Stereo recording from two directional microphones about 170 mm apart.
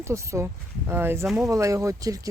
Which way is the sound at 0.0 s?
15° right (ahead or behind).